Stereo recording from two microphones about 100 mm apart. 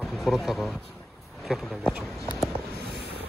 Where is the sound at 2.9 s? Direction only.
70° left (ahead or behind).